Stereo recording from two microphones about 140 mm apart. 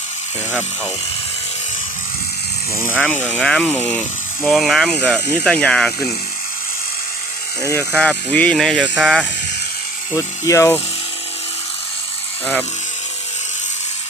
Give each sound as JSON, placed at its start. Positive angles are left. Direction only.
{"t": 2.7, "sound": "speech", "side_deg": 15}
{"t": 4.4, "sound": "speech", "side_deg": 0}
{"t": 7.6, "sound": "speech", "side_deg": 20}
{"t": 7.9, "sound": "speech", "side_deg": 10}
{"t": 10.2, "sound": "speech", "side_deg": 20}